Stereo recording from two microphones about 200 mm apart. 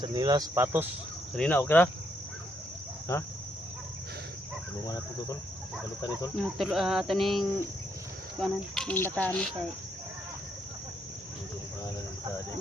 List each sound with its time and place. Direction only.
0.0 s speech: 20° right (ahead or behind)
1.4 s speech: 10° left (ahead or behind)
6.3 s cricket: centre (ahead or behind)